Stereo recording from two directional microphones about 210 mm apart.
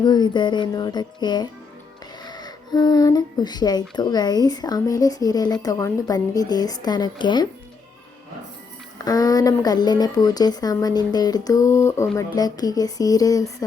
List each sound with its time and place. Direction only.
0.0 s speech: 20° left (ahead or behind)
9.0 s a woman's voice: 15° left (ahead or behind)